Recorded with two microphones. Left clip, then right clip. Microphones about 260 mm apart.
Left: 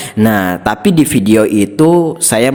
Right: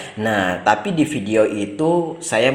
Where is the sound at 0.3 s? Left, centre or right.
Left.